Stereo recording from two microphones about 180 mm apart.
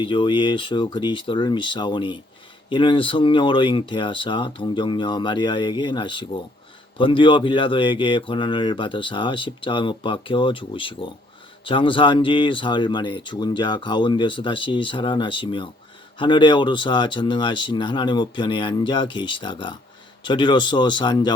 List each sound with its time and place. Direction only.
0.0 s speech: 30° left (ahead or behind)